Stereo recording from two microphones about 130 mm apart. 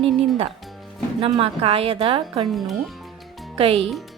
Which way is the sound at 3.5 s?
50° right (ahead or behind).